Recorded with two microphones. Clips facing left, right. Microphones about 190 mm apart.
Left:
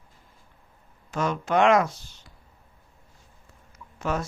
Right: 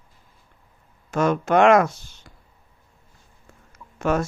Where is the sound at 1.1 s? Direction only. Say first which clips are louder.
Right 5 dB; 50° right (ahead or behind).